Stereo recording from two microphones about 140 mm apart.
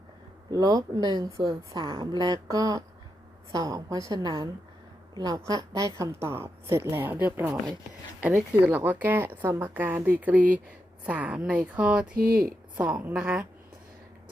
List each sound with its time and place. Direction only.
0.5 s a woman's voice: 25° right (ahead or behind); by 12.0 s 5° right (ahead or behind)
12.1 s speech: 90° right
12.7 s a woman's voice: 10° right (ahead or behind)